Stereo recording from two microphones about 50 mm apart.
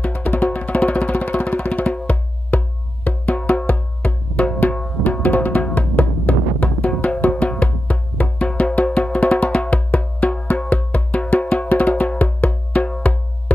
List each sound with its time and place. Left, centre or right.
0.0 s music: left